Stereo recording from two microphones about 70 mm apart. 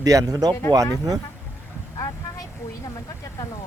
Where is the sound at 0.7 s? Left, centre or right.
Right.